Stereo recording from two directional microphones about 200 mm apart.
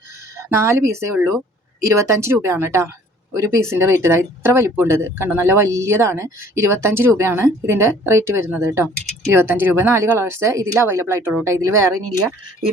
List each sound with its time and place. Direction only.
0.3 s speech: 15° right (ahead or behind)